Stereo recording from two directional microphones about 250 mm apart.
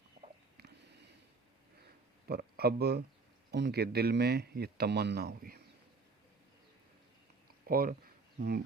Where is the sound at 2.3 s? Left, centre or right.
Right.